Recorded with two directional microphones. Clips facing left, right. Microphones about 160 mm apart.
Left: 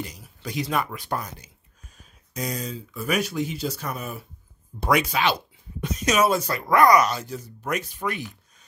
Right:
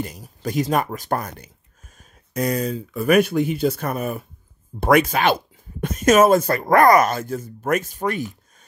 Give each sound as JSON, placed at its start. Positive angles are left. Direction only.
{"t": 0.0, "sound": "speech", "side_deg": -50}